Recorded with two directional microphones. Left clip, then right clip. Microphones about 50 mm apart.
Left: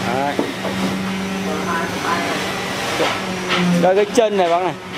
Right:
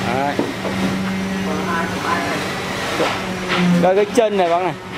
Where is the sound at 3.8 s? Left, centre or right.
Centre.